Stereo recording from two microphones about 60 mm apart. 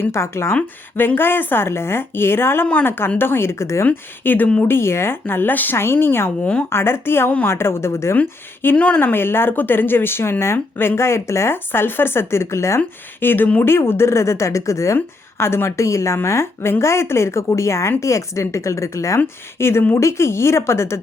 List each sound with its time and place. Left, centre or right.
0.1 s a woman's voice: left
0.9 s a woman's voice: left
3.8 s speech: left
4.7 s speech: left
5.7 s a woman's voice: left
8.1 s speech: left
9.1 s speech: left
13.1 s a woman's voice: left
14.9 s a woman's voice: left
19.5 s a woman's voice: left